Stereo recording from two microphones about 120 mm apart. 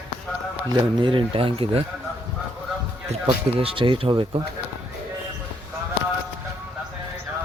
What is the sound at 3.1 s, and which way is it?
Speech, 55° right (ahead or behind).